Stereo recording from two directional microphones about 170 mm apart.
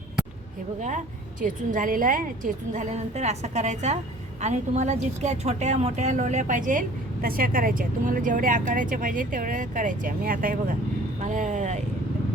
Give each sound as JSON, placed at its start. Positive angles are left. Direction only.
{"t": 0.8, "sound": "a woman's voice", "side_deg": -45}